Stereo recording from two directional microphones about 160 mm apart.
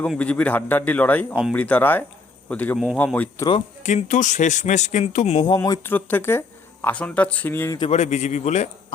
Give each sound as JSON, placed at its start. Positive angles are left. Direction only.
{"t": 0.0, "sound": "a man's voice", "side_deg": 10}
{"t": 2.7, "sound": "speech", "side_deg": 0}
{"t": 3.0, "sound": "a man's voice", "side_deg": 10}
{"t": 3.8, "sound": "speech", "side_deg": 50}
{"t": 5.5, "sound": "a man's voice", "side_deg": 20}
{"t": 7.8, "sound": "speech", "side_deg": 45}